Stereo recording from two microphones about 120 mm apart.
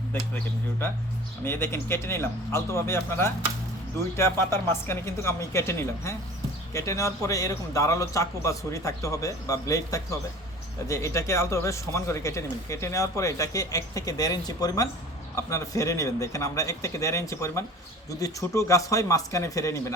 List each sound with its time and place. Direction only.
1.5 s speech: 20° left (ahead or behind)